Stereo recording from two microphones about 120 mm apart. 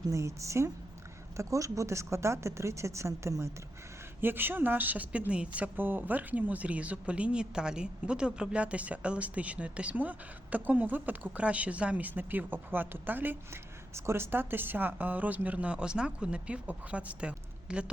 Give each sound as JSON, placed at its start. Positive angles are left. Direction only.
{"t": 0.1, "sound": "a woman's voice", "side_deg": -25}